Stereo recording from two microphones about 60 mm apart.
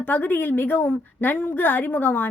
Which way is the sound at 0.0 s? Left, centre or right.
Left.